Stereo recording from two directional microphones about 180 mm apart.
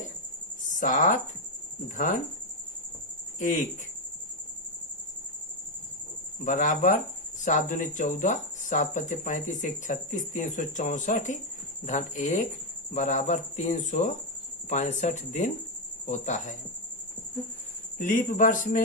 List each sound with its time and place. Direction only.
0.6 s a sound: 45° left (ahead or behind)
3.3 s speech: 45° left (ahead or behind)
6.4 s speech: 45° left (ahead or behind)
17.9 s speech: 45° left (ahead or behind)